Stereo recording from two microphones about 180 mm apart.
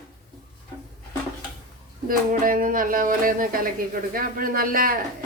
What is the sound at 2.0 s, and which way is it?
A woman's voice, 50° right (ahead or behind).